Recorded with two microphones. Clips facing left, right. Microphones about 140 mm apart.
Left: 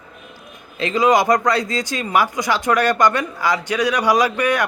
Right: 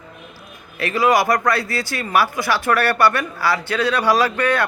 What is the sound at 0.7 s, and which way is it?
Speech, 20° left (ahead or behind).